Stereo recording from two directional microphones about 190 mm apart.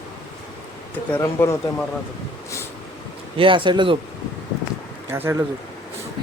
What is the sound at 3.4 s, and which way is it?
Speech, 25° right (ahead or behind).